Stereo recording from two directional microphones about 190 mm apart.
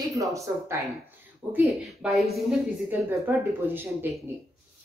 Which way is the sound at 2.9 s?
10° right (ahead or behind).